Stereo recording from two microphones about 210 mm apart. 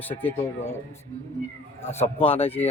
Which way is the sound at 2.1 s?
25° left (ahead or behind).